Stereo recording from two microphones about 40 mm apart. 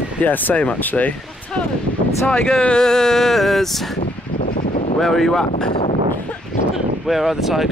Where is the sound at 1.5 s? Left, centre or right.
Left; by 3.9 s centre.